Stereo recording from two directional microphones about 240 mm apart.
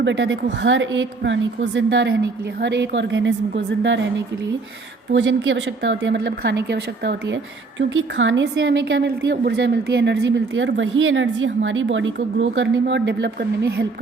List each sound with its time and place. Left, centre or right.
0.0 s a woman's voice: right
5.1 s a woman's voice: right